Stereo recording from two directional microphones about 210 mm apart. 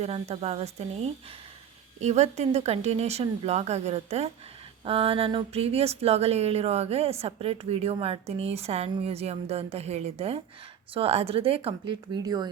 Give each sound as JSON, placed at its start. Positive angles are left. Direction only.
{"t": 0.0, "sound": "a woman's voice", "side_deg": -30}